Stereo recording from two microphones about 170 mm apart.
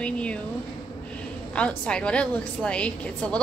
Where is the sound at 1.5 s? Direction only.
5° left (ahead or behind).